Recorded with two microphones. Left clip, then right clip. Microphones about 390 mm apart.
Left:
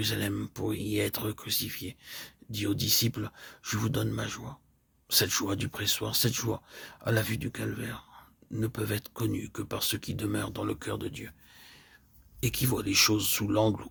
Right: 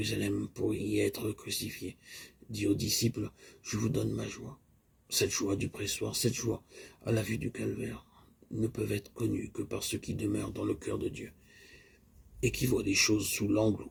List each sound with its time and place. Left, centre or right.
0.2 s speech: left
0.7 s speech: left
0.9 s speech: left